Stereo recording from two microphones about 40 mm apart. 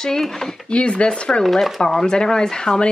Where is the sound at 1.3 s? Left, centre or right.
Centre.